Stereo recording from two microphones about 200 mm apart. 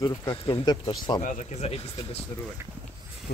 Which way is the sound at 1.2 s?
30° left (ahead or behind).